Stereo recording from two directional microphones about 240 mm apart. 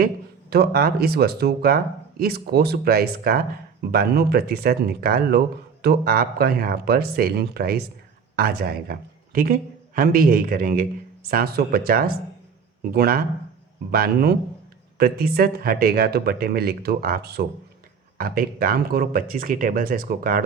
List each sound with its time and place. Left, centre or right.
0.5 s a man's voice: right